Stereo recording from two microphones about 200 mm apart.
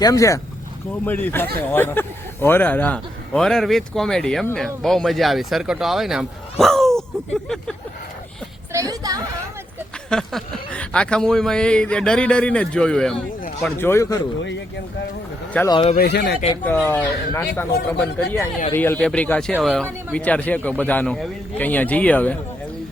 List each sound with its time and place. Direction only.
0.0 s a man's voice: 15° left (ahead or behind)
8.7 s a woman's voice: 15° right (ahead or behind)
10.1 s a man's voice: 5° left (ahead or behind)
15.5 s speech: 20° left (ahead or behind)
16.0 s speech: 55° left (ahead or behind)
16.6 s a man's voice: 10° left (ahead or behind)